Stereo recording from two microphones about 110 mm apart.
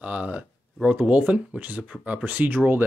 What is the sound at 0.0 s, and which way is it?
Speech, 15° right (ahead or behind).